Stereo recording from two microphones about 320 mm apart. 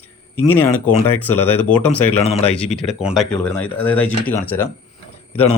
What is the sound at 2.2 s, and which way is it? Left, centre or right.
Speech, centre.